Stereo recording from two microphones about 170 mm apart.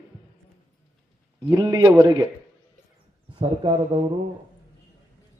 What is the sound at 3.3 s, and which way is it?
Speech, 25° right (ahead or behind).